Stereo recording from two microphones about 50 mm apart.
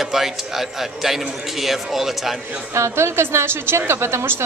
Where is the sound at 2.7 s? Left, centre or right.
Right.